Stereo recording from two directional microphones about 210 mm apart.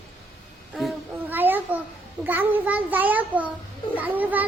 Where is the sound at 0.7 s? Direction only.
5° right (ahead or behind).